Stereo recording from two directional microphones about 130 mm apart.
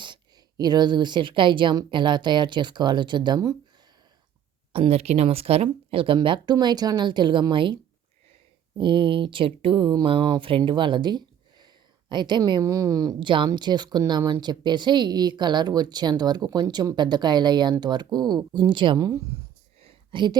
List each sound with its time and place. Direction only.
0.0 s speech: 35° right (ahead or behind)
4.7 s speech: 50° right (ahead or behind)
8.8 s speech: 40° right (ahead or behind)
19.8 s a sound: 45° right (ahead or behind)